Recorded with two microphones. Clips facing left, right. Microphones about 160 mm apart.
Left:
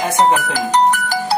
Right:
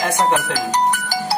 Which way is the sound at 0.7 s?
55° left (ahead or behind).